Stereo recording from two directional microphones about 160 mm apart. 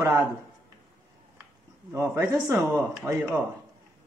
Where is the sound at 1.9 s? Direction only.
15° right (ahead or behind).